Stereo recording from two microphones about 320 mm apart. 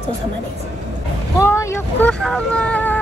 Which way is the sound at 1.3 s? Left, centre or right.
Centre.